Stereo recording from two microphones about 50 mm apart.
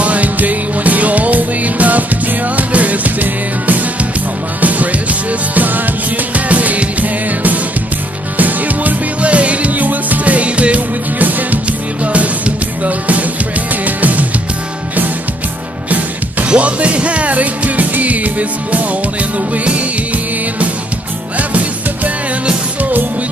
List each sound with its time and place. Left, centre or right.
0.0 s music: right
16.4 s music: right
21.4 s music: right